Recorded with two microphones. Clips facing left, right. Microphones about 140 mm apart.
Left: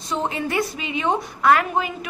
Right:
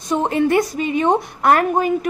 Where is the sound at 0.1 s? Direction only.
55° right (ahead or behind).